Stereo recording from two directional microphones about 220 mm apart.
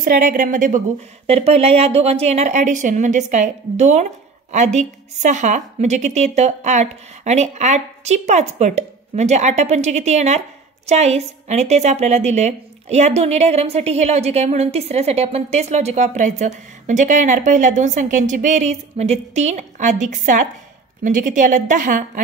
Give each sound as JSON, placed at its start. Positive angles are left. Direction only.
{"t": 0.0, "sound": "a woman's voice", "side_deg": -40}